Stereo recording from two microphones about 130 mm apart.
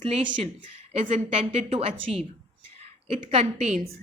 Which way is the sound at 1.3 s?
50° right (ahead or behind).